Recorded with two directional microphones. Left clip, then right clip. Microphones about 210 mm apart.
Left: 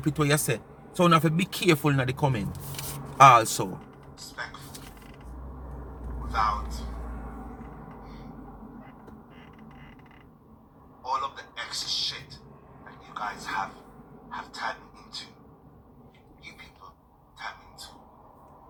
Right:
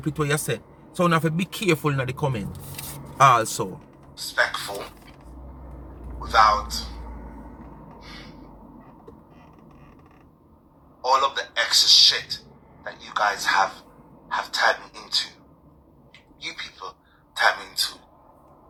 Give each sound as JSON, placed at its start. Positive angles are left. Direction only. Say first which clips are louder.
{"t": 0.0, "sound": "speech", "louder": "even", "side_deg": 5}
{"t": 4.1, "sound": "a man's voice", "louder": "right 15 dB", "side_deg": -35}
{"t": 6.2, "sound": "a man's voice", "louder": "right 10 dB", "side_deg": -35}
{"t": 8.0, "sound": "gasp", "louder": "right 5 dB", "side_deg": -40}
{"t": 11.0, "sound": "a man's voice", "louder": "right 10 dB", "side_deg": -40}
{"t": 16.4, "sound": "a sound", "louder": "right 13 dB", "side_deg": -40}
{"t": 17.3, "sound": "gasp", "louder": "right 19 dB", "side_deg": -50}